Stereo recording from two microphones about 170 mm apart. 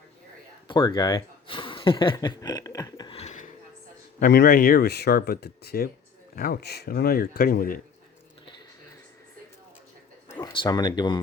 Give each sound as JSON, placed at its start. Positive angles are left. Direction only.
{"t": 0.7, "sound": "speech", "side_deg": 20}
{"t": 3.2, "sound": "dishes", "side_deg": 45}
{"t": 4.2, "sound": "speech", "side_deg": 70}
{"t": 10.2, "sound": "a sound", "side_deg": 15}
{"t": 10.5, "sound": "speech", "side_deg": 25}